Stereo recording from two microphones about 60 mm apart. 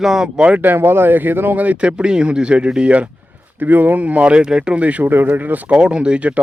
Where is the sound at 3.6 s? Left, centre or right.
Right.